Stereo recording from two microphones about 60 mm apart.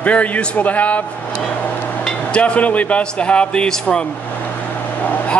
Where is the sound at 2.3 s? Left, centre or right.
Left.